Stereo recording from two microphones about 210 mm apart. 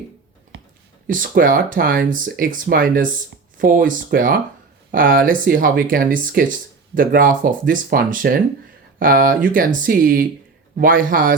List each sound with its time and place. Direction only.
1.0 s speech: 40° right (ahead or behind)